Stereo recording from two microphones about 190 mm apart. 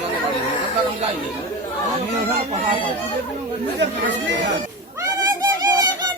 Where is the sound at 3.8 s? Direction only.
70° right (ahead or behind).